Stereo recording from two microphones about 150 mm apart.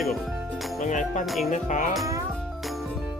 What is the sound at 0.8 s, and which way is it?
Speech, 55° left (ahead or behind).